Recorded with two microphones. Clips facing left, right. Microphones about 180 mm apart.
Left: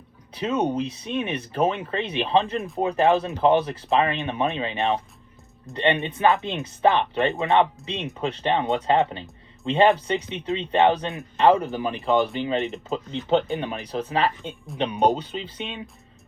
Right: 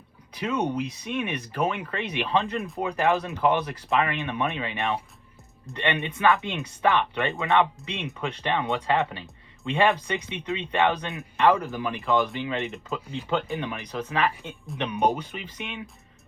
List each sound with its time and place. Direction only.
0.3 s speech: 25° left (ahead or behind)
7.3 s speech: 20° left (ahead or behind)
14.7 s speech: centre (ahead or behind)
15.3 s speech: 30° left (ahead or behind)